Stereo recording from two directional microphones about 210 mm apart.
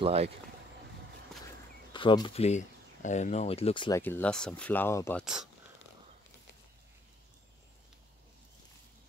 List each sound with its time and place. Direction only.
0.0 s speech: 30° right (ahead or behind)
1.9 s speech: 20° left (ahead or behind)
4.0 s speech: 10° left (ahead or behind)
5.2 s speech: 5° right (ahead or behind)